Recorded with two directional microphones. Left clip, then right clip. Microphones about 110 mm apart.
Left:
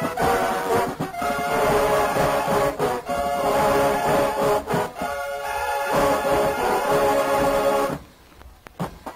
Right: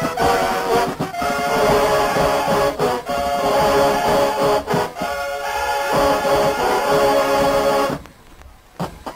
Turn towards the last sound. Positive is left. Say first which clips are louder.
# right 4 dB
turn(degrees=20)  # may be behind; listen again after turning